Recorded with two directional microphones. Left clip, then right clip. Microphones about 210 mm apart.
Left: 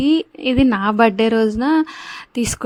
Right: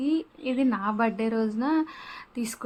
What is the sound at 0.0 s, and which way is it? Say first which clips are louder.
A woman's voice: left 11 dB; 40° left (ahead or behind).